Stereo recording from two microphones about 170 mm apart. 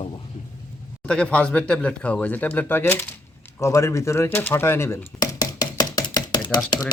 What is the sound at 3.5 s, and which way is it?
Bird, 15° left (ahead or behind).